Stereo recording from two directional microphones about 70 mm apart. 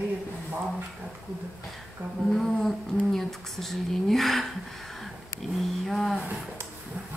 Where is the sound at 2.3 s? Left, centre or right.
Centre.